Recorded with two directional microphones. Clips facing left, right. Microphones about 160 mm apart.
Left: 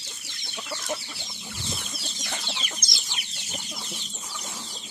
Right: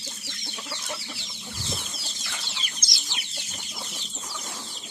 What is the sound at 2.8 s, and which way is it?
Chicken, 50° left (ahead or behind).